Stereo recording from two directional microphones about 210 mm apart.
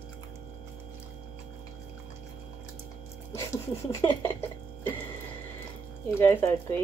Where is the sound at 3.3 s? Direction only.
10° left (ahead or behind).